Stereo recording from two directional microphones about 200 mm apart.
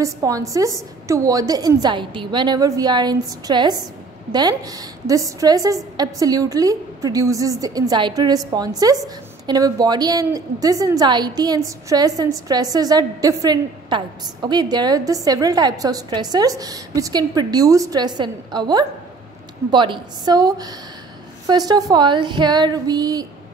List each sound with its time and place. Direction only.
0.0 s a woman's voice: 15° right (ahead or behind)